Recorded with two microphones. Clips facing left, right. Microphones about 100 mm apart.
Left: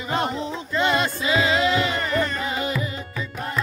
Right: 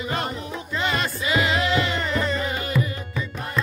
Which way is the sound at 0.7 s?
20° left (ahead or behind).